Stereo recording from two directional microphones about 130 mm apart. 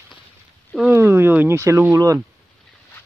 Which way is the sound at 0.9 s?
20° right (ahead or behind).